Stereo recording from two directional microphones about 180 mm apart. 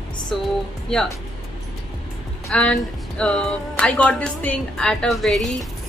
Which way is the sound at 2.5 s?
5° left (ahead or behind).